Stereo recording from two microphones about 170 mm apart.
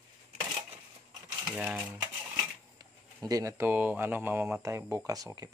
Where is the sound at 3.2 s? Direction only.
20° right (ahead or behind).